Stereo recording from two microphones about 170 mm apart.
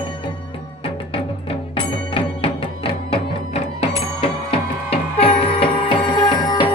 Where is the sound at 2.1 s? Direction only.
30° left (ahead or behind).